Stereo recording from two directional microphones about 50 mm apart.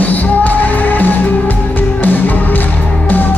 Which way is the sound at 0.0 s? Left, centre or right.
Left.